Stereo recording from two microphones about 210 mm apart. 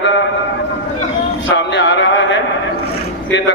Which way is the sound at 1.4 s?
60° left (ahead or behind).